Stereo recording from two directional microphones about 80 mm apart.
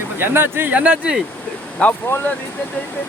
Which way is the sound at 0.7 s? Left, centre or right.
Centre.